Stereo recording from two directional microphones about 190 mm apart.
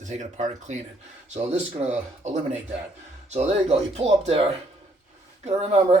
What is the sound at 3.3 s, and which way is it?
Speech, 35° right (ahead or behind).